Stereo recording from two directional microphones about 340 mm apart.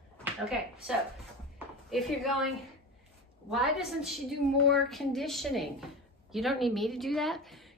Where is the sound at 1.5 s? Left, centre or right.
Centre.